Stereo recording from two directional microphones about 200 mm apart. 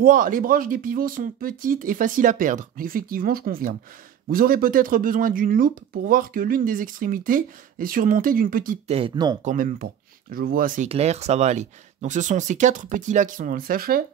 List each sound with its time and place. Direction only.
0.0 s speech: 45° right (ahead or behind)
8.8 s speech: 30° right (ahead or behind)
9.4 s speech: 40° right (ahead or behind)
10.9 s speech: 30° right (ahead or behind)